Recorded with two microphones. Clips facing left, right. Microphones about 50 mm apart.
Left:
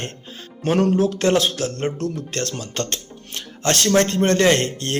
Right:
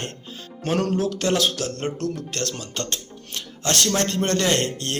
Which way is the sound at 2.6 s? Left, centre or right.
Left.